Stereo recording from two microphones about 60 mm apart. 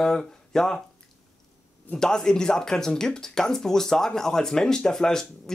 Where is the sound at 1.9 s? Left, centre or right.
Centre.